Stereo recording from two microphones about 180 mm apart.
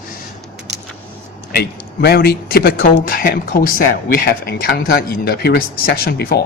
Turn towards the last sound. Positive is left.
turn(degrees=60)  # may be behind; listen again after turning